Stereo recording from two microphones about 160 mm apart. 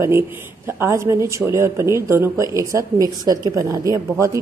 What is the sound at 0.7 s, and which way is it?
Speech, 15° right (ahead or behind).